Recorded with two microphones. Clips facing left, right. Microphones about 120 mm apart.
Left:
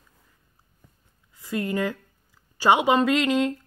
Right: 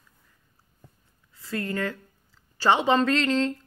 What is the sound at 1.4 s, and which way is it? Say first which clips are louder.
Speech: left 3 dB; 15° left (ahead or behind).